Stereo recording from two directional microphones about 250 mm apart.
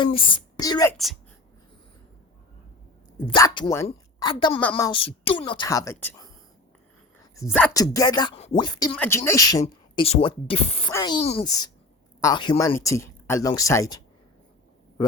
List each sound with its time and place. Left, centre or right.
0.0 s speech: centre
3.2 s a woman's voice: centre
7.3 s speech: centre